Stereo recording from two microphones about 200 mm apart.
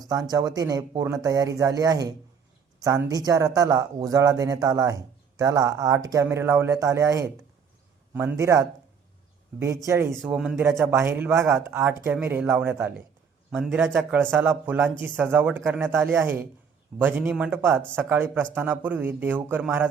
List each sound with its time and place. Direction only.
0.1 s a man's voice: 20° right (ahead or behind)